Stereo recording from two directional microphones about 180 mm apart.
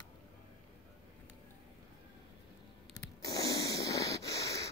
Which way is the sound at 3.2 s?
20° left (ahead or behind).